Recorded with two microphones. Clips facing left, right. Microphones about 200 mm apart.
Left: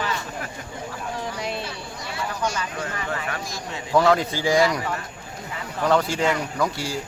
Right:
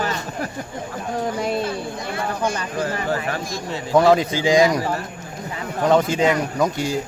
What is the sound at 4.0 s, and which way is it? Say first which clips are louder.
Speech: right 4 dB; 20° right (ahead or behind).